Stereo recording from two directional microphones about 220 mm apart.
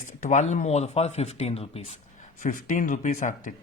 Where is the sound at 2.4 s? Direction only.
35° left (ahead or behind).